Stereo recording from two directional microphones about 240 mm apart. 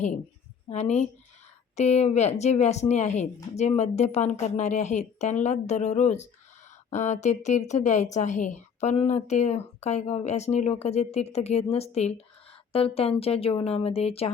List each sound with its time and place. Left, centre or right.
0.7 s a woman's voice: left